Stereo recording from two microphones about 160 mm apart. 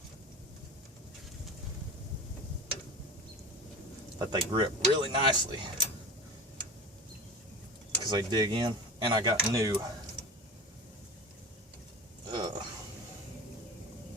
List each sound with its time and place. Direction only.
4.2 s speech: 30° right (ahead or behind)
8.1 s speech: 25° right (ahead or behind)
12.3 s a sound: 25° right (ahead or behind)